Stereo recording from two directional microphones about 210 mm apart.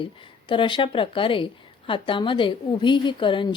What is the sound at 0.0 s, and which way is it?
A woman's voice, 25° left (ahead or behind).